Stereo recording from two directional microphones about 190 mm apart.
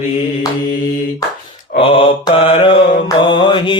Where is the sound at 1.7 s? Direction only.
25° left (ahead or behind).